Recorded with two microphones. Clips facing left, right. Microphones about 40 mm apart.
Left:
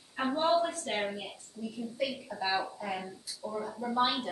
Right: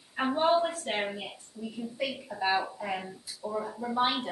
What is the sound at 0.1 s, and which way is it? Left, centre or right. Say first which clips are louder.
A woman's voice: right 2 dB; centre.